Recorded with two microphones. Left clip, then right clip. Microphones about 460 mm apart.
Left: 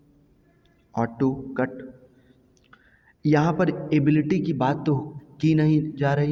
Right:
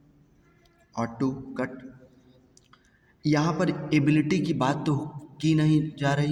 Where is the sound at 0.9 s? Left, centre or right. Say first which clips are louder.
Left 5 dB; left.